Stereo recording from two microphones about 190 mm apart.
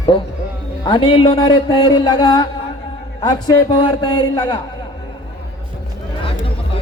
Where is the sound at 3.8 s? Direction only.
25° left (ahead or behind).